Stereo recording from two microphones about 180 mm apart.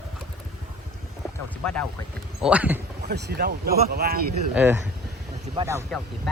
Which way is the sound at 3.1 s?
65° right (ahead or behind).